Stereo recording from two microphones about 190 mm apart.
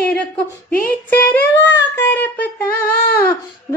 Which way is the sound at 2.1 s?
10° left (ahead or behind).